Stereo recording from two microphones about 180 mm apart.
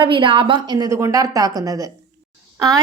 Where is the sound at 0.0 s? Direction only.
30° right (ahead or behind).